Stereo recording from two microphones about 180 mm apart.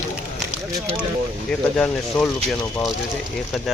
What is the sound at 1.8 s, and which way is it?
Speech, 5° left (ahead or behind).